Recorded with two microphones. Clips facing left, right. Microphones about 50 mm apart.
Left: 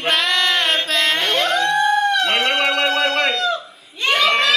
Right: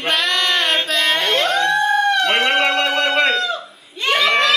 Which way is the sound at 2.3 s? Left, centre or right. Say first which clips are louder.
Right 2 dB; centre.